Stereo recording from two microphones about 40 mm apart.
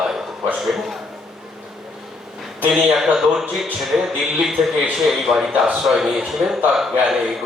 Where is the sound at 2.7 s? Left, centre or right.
Centre.